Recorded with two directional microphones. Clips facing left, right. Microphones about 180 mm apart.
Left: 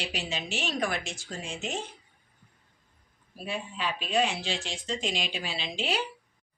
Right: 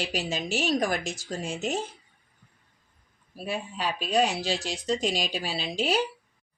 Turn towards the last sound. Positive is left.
turn(degrees=-40)  # may be behind; listen again after turning